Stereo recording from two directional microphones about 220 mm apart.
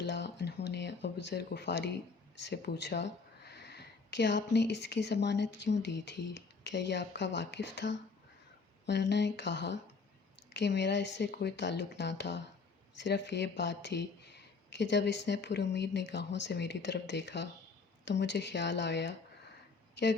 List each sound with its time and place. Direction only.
0.0 s speech: 50° left (ahead or behind)